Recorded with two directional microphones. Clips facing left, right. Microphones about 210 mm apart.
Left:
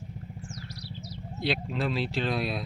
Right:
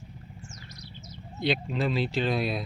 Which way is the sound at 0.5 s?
35° left (ahead or behind).